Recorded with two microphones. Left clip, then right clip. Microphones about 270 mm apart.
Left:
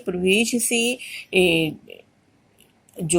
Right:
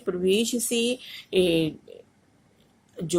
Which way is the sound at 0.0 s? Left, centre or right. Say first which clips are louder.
Left 4 dB; centre.